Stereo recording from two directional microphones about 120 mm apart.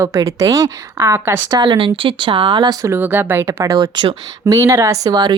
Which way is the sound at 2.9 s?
15° right (ahead or behind).